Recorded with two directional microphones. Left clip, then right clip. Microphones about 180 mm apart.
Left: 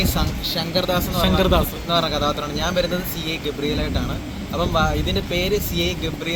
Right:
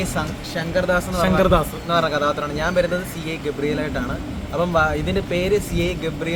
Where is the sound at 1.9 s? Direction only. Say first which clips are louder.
Right 2 dB; 15° right (ahead or behind).